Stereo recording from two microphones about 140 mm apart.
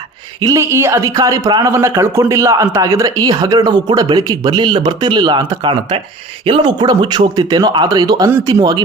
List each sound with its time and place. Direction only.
0.3 s a man's voice: 25° right (ahead or behind)